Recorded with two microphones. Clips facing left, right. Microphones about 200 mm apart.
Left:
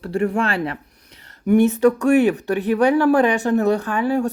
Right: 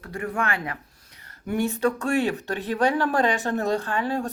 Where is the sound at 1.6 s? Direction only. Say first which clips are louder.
Left 9 dB; 15° left (ahead or behind).